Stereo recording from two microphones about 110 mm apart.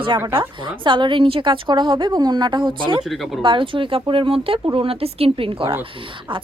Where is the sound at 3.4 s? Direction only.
50° right (ahead or behind).